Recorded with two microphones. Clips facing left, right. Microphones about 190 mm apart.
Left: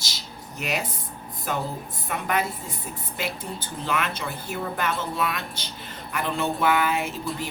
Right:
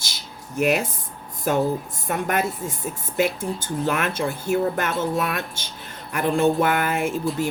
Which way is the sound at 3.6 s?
50° right (ahead or behind).